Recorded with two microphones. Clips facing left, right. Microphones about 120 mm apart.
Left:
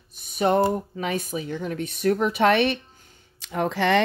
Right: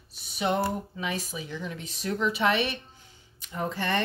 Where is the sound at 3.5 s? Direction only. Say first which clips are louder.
Left 8 dB; 85° left.